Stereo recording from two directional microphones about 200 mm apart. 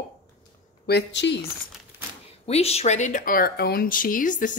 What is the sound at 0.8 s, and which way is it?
Speech, 55° left (ahead or behind).